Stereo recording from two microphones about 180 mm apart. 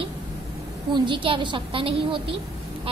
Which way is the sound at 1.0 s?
30° right (ahead or behind).